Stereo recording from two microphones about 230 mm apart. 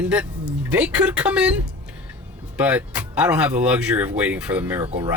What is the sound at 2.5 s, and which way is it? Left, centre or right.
Speech, centre.